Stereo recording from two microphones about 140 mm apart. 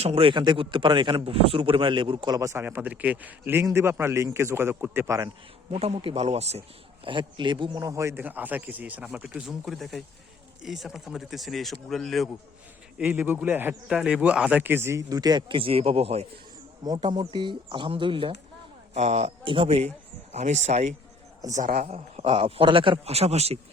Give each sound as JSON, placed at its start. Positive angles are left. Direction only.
{"t": 0.0, "sound": "a man's voice", "side_deg": -45}
{"t": 5.7, "sound": "a man's voice", "side_deg": -45}
{"t": 7.0, "sound": "speech", "side_deg": -35}
{"t": 13.0, "sound": "speech", "side_deg": -10}
{"t": 16.8, "sound": "speech", "side_deg": -30}
{"t": 18.9, "sound": "a man's voice", "side_deg": -50}
{"t": 21.4, "sound": "a man's voice", "side_deg": -65}
{"t": 21.8, "sound": "a man's voice", "side_deg": -50}